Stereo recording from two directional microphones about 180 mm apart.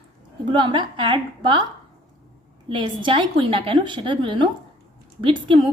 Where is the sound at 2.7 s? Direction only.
25° right (ahead or behind).